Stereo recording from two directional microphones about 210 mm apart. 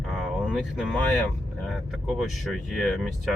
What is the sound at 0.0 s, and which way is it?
Vehicle, centre (ahead or behind).